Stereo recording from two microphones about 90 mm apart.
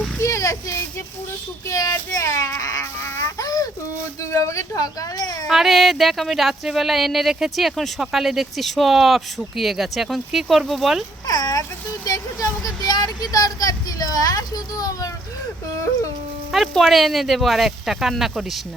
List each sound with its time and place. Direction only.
0.2 s a sound: 35° left (ahead or behind)
1.6 s baby cry: 40° left (ahead or behind)
4.2 s a woman's voice: 35° left (ahead or behind)
5.5 s speech: centre (ahead or behind)
11.3 s a sound: 45° left (ahead or behind)
16.5 s speech: centre (ahead or behind)